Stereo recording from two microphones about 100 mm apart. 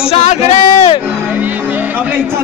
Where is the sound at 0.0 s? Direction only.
90° left.